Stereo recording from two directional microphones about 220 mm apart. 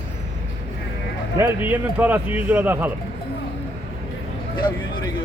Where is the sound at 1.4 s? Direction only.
10° right (ahead or behind).